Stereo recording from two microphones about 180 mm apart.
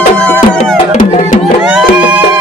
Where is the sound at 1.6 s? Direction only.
5° right (ahead or behind).